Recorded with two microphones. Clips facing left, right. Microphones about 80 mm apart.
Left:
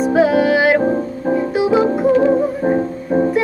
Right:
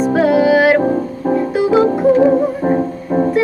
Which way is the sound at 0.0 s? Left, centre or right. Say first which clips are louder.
Right 1 dB; centre.